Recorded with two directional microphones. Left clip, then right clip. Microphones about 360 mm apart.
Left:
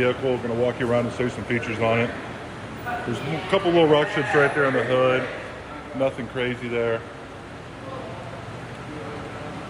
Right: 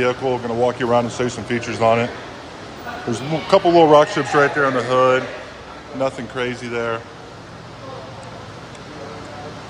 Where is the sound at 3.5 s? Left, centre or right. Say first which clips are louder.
Right 7 dB; centre.